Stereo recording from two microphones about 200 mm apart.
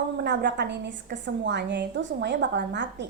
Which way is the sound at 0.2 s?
60° right (ahead or behind).